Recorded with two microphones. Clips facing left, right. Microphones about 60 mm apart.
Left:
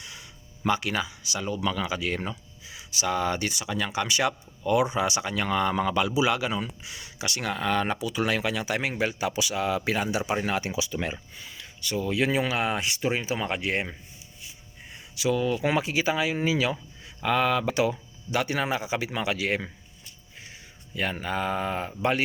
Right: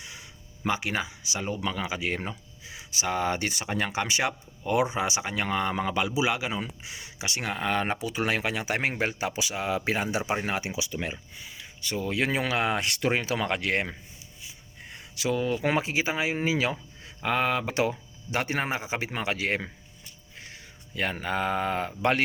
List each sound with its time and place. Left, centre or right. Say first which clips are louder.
0.0 s speech: even; right
10.7 s speech: left 2 dB; centre
11.8 s speech: left 2 dB; right
14.8 s a sound: left 2 dB; right
15.6 s speech: left 1 dB; right
17.7 s speech: left 2 dB; right
20.5 s speech: even; right